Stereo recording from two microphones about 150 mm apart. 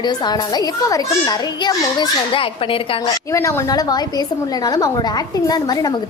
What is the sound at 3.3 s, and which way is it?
A child's voice, 20° left (ahead or behind).